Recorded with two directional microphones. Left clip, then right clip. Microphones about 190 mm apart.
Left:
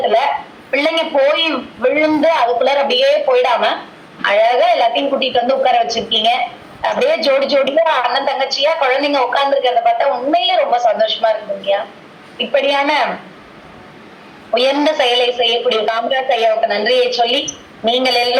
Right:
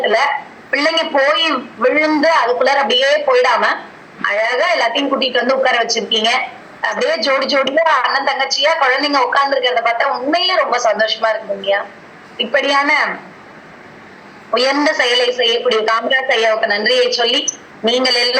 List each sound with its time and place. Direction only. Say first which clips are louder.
0.0 s a woman's voice: even; 20° right (ahead or behind)
14.5 s a woman's voice: even; 20° right (ahead or behind)